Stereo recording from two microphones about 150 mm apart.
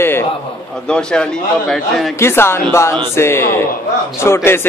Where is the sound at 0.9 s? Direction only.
5° left (ahead or behind).